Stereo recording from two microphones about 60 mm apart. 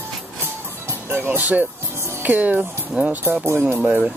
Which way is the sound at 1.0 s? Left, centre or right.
Right.